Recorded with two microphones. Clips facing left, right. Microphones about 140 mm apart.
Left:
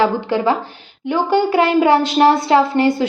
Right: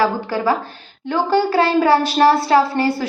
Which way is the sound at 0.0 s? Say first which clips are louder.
Left 2 dB; 20° left (ahead or behind).